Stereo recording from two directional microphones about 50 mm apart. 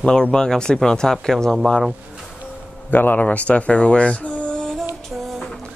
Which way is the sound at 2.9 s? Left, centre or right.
Left.